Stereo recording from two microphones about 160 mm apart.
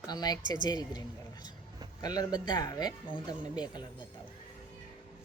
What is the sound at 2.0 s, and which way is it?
Speech, 25° left (ahead or behind).